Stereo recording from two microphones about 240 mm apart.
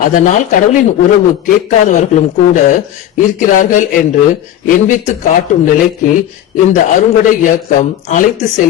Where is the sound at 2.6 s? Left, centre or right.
Left.